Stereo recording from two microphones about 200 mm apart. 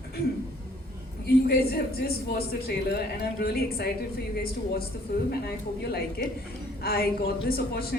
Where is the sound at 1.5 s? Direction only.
50° left (ahead or behind).